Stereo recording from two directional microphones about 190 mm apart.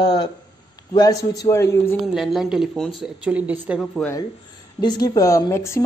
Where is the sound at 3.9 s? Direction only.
10° left (ahead or behind).